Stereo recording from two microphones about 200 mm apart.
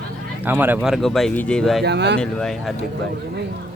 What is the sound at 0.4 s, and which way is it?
Speech, 10° right (ahead or behind).